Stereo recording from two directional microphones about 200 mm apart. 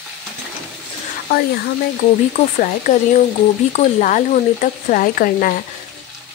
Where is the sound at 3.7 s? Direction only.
35° left (ahead or behind).